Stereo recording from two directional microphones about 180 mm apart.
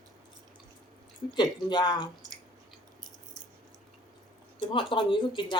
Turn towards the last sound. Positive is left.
turn(degrees=25)  # may be behind; listen again after turning